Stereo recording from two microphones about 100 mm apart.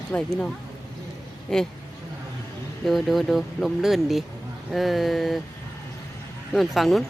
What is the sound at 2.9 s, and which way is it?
Speech, centre (ahead or behind).